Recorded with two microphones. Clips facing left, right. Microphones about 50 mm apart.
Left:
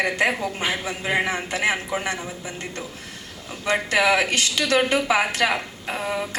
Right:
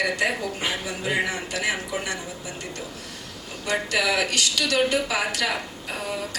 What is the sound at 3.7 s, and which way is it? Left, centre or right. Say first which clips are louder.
A woman's voice: left 4 dB; left.